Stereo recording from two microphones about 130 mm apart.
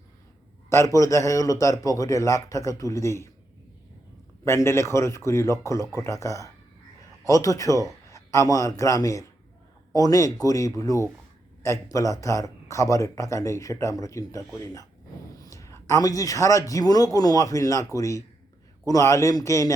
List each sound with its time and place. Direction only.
0.7 s speech: 25° left (ahead or behind)
4.4 s speech: 20° left (ahead or behind)